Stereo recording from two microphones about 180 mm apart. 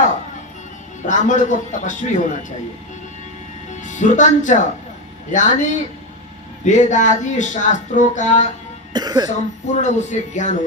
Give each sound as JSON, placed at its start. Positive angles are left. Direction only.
{"t": 1.0, "sound": "speech", "side_deg": 45}
{"t": 3.7, "sound": "speech", "side_deg": 45}
{"t": 8.9, "sound": "cough", "side_deg": -20}
{"t": 9.7, "sound": "speech", "side_deg": 40}